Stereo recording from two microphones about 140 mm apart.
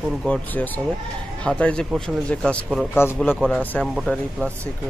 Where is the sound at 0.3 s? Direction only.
10° left (ahead or behind).